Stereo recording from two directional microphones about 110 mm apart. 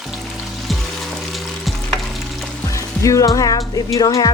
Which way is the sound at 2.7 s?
30° left (ahead or behind).